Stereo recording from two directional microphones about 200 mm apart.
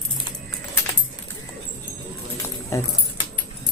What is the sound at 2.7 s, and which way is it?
Keys jangling, 15° left (ahead or behind).